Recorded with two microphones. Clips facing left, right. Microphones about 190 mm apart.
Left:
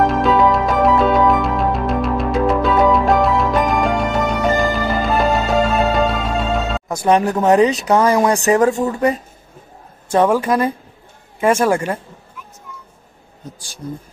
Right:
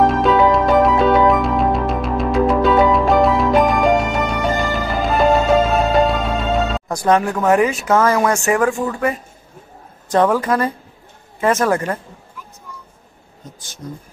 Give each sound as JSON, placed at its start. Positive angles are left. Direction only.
{"t": 0.0, "sound": "music", "side_deg": 0}
{"t": 7.0, "sound": "speech", "side_deg": 20}
{"t": 10.1, "sound": "speech", "side_deg": 10}